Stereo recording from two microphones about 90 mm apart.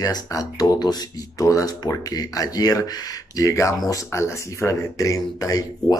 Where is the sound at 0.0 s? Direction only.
40° left (ahead or behind).